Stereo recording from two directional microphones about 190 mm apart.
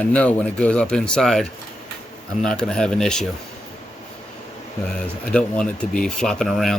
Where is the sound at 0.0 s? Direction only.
5° left (ahead or behind).